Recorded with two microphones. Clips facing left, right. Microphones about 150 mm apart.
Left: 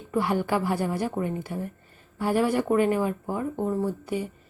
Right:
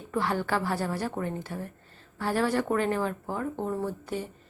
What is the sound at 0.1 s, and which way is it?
A woman's voice, 15° left (ahead or behind).